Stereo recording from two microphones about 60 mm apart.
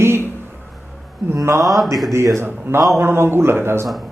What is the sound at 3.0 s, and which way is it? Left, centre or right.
Speech, right.